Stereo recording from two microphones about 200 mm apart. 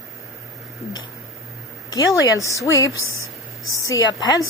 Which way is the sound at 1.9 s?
15° left (ahead or behind).